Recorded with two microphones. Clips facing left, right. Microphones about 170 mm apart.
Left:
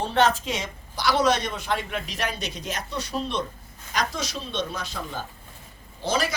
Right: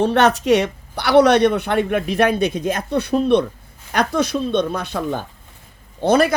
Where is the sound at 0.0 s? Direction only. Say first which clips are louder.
Right 7 dB; 70° right (ahead or behind).